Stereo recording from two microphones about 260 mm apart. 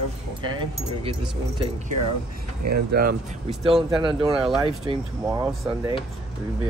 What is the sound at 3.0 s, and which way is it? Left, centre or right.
Speech, right.